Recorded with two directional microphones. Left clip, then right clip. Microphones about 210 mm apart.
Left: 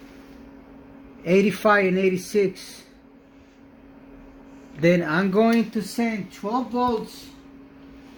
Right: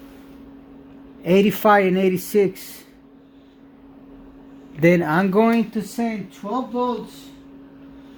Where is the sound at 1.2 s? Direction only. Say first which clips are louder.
Right 3 dB; 45° right (ahead or behind).